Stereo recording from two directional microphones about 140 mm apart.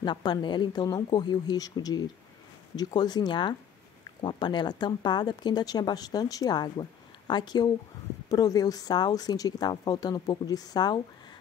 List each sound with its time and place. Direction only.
0.0 s speech: 30° left (ahead or behind)